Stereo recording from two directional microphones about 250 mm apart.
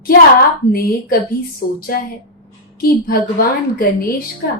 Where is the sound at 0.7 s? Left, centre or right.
Left.